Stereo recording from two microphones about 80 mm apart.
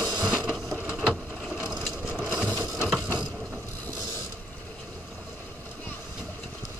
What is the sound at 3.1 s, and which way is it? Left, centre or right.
Mechanisms, centre.